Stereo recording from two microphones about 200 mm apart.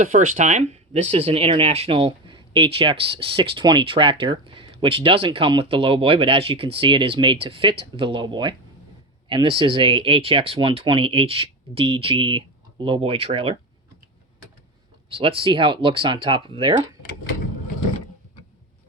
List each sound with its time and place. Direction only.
0.0 s speech: 40° right (ahead or behind)
15.1 s speech: 25° right (ahead or behind)
17.0 s speech: 50° left (ahead or behind)